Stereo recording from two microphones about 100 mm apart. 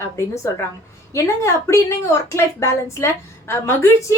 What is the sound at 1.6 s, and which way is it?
A woman's voice, 30° left (ahead or behind).